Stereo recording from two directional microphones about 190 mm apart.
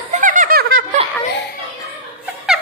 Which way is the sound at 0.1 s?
45° right (ahead or behind).